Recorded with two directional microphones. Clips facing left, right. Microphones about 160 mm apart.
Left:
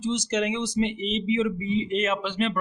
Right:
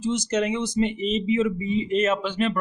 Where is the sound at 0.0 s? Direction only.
50° right (ahead or behind).